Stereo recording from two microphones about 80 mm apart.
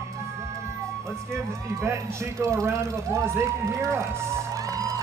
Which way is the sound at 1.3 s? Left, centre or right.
Right.